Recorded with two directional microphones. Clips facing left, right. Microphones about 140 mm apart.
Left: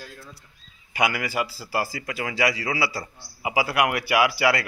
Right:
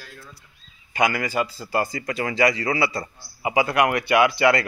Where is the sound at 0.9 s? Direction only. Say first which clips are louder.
Right 3 dB; 10° left (ahead or behind).